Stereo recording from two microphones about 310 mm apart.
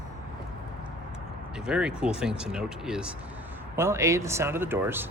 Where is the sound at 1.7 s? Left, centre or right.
Centre.